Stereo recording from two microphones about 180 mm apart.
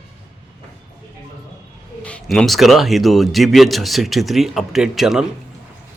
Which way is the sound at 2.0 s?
5° left (ahead or behind).